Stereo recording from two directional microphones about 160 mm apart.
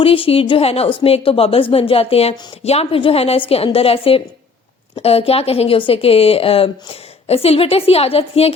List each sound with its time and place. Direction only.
0.0 s a woman's voice: 35° left (ahead or behind)